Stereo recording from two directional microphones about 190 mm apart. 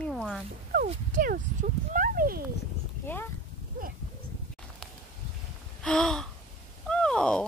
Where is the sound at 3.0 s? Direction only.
10° left (ahead or behind).